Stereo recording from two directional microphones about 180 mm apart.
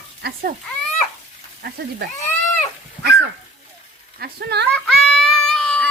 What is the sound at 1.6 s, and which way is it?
Speech, 65° right (ahead or behind).